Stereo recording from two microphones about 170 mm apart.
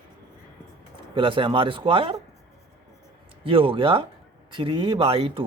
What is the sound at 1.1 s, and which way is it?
Speech, 30° right (ahead or behind).